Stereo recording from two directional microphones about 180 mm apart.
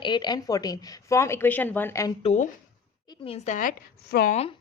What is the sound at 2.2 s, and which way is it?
A woman's voice, 35° left (ahead or behind).